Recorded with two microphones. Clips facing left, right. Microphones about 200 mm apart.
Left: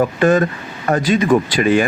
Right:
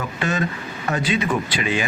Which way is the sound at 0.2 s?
50° left (ahead or behind).